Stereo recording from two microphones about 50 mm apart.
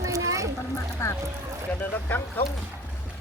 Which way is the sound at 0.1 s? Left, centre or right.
Right.